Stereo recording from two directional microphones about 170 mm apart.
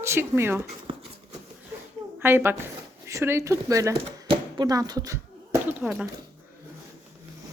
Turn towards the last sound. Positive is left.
turn(degrees=-5)  # may be behind; listen again after turning